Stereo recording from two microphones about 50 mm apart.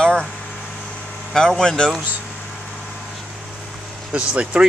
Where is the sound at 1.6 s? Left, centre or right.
Centre.